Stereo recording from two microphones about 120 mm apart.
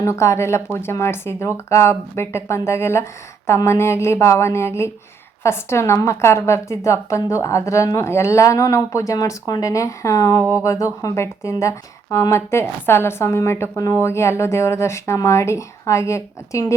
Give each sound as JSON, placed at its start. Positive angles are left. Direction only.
{"t": 0.0, "sound": "a woman's voice", "side_deg": 25}